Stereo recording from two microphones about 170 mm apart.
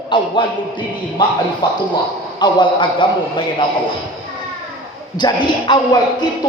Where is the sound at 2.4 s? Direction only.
25° left (ahead or behind).